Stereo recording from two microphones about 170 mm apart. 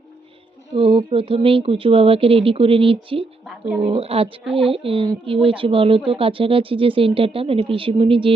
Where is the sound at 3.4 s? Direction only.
5° right (ahead or behind).